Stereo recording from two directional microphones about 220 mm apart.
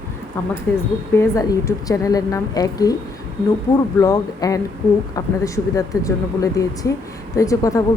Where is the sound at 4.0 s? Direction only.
15° left (ahead or behind).